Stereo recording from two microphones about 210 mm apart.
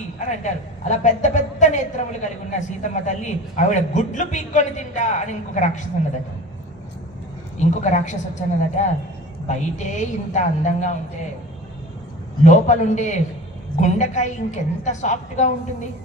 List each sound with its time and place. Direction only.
0.2 s a woman's voice: 35° left (ahead or behind)
7.5 s a woman's voice: 35° left (ahead or behind)
12.4 s a woman's voice: 35° left (ahead or behind)